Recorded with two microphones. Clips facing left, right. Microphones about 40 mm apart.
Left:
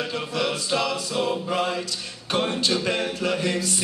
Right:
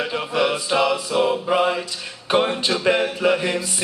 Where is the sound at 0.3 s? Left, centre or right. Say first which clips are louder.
Right 6 dB; right.